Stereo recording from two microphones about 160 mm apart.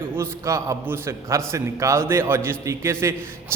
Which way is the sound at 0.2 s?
20° right (ahead or behind).